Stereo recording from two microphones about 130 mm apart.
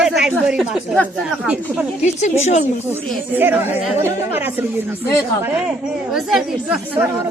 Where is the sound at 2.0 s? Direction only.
60° left (ahead or behind).